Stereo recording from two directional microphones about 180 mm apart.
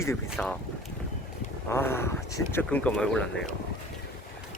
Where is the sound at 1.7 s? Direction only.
15° left (ahead or behind).